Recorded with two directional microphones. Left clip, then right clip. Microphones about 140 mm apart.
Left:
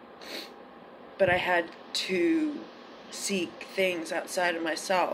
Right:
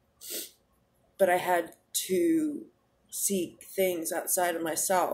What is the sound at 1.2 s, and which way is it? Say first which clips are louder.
Speech: even; 25° right (ahead or behind).